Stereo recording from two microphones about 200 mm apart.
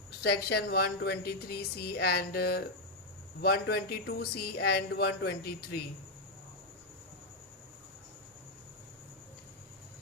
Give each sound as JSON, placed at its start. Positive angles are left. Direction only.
{"t": 0.2, "sound": "a woman's voice", "side_deg": 55}